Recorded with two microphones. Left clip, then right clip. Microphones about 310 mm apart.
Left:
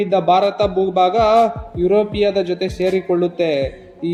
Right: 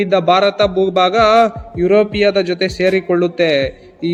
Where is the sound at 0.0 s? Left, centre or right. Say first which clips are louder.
Right 2 dB; right.